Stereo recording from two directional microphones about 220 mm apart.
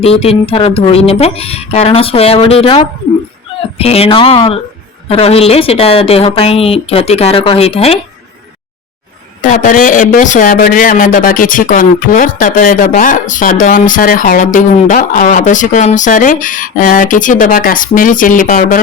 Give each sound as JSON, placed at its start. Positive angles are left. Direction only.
{"t": 0.0, "sound": "a woman's voice", "side_deg": 25}
{"t": 9.4, "sound": "speech", "side_deg": 35}